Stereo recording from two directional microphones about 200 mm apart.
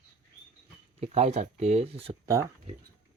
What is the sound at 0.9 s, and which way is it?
Speech, 30° right (ahead or behind).